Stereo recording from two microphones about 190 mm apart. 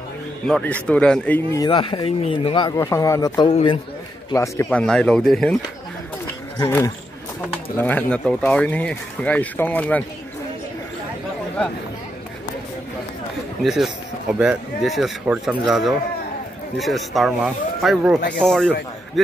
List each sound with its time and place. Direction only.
0.5 s speech: 5° left (ahead or behind)
1.6 s speech: 25° left (ahead or behind)
3.5 s a man's voice: 30° left (ahead or behind)
4.3 s speech: 15° left (ahead or behind)
4.6 s speech: 5° left (ahead or behind)
6.6 s speech: 15° left (ahead or behind)
13.7 s speech: centre (ahead or behind)